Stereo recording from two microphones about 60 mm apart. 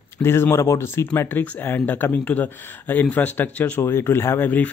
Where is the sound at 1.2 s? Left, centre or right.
Left.